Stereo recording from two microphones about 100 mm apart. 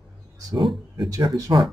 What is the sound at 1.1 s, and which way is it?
Speech, 40° right (ahead or behind).